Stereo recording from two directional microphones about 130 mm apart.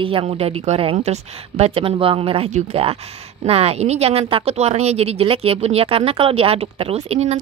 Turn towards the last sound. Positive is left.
turn(degrees=-50)  # may be behind; listen again after turning